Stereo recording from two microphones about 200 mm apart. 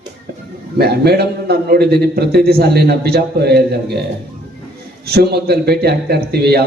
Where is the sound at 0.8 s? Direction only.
55° right (ahead or behind).